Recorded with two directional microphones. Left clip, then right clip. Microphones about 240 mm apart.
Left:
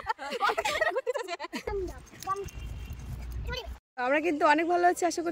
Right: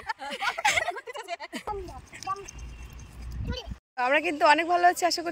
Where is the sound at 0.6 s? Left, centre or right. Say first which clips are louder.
Right 4 dB; centre.